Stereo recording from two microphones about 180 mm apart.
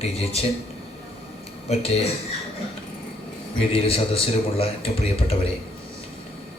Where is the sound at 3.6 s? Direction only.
30° left (ahead or behind).